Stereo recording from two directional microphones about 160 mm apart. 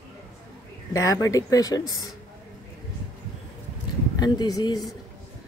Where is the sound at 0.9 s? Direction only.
20° left (ahead or behind).